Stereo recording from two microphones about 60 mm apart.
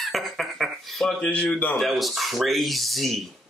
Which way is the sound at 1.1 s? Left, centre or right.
Centre.